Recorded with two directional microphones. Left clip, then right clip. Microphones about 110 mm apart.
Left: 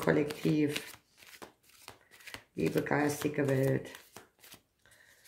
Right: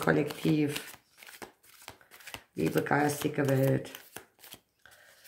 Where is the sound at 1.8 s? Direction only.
25° right (ahead or behind).